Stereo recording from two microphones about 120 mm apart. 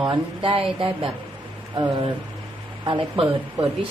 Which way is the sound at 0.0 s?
45° right (ahead or behind).